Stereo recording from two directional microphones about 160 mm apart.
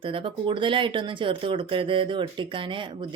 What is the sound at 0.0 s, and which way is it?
Speech, 35° right (ahead or behind).